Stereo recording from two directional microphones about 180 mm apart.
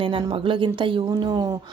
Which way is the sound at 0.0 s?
30° right (ahead or behind).